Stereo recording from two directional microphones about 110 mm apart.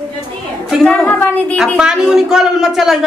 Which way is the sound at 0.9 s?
15° left (ahead or behind).